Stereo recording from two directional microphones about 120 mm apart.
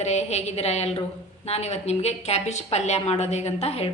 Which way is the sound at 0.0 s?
70° left (ahead or behind).